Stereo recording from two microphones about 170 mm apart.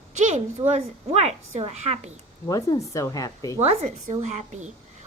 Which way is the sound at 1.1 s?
40° right (ahead or behind).